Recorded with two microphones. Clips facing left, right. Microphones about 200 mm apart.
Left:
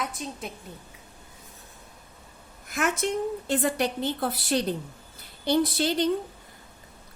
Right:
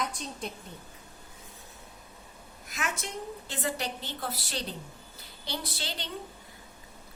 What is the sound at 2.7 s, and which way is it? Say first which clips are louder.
A woman's voice: left 10 dB; 55° left (ahead or behind).